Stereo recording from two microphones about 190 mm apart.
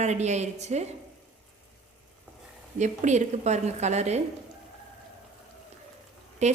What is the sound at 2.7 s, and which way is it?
A woman's voice, 40° right (ahead or behind).